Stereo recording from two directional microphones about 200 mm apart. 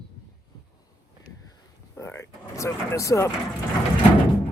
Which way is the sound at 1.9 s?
10° left (ahead or behind).